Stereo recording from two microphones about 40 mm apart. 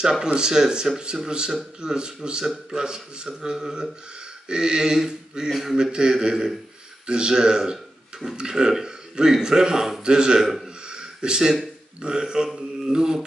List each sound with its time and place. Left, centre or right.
0.2 s a man's voice: centre
5.5 s speech: centre
5.8 s a man's voice: right
10.9 s a sound: right
12.0 s a man's voice: centre